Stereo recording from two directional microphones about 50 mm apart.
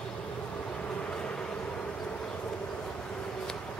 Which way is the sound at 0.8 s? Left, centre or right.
Left.